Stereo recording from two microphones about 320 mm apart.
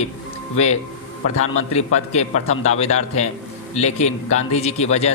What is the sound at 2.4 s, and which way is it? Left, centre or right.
Speech, left.